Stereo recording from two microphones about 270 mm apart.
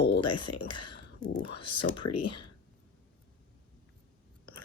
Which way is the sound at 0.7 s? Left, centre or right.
Centre.